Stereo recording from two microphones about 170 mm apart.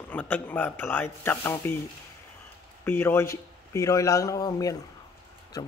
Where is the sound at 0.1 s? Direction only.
10° left (ahead or behind).